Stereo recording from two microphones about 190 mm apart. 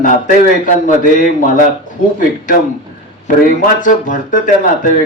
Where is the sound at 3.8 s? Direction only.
45° left (ahead or behind).